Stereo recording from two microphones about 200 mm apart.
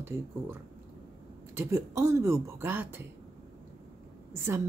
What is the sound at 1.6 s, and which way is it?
Speech, 15° right (ahead or behind).